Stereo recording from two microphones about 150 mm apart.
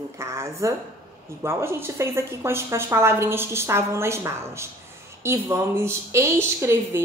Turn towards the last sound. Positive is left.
turn(degrees=-15)  # may be behind; listen again after turning